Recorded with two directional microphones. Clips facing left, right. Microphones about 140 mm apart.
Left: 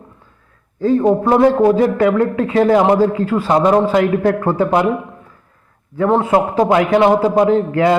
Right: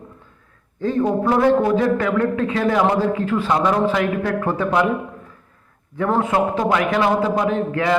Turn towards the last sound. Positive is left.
turn(degrees=30)  # may be behind; listen again after turning